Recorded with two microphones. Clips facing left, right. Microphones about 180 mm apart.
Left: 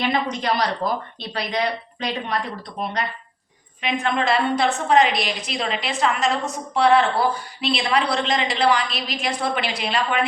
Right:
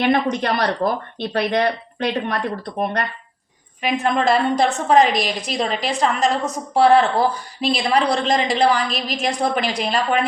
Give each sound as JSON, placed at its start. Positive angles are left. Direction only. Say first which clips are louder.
{"t": 0.0, "sound": "speech", "louder": "right 5 dB", "side_deg": -55}
{"t": 3.8, "sound": "a woman's voice", "louder": "right 3 dB", "side_deg": -40}